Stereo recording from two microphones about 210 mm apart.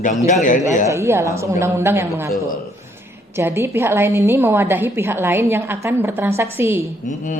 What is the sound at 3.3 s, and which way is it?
A woman's voice, 10° right (ahead or behind).